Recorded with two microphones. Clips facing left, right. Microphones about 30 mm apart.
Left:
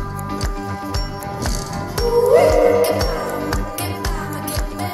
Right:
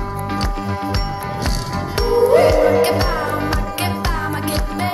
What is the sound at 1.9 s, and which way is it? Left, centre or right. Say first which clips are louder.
Music: even; right.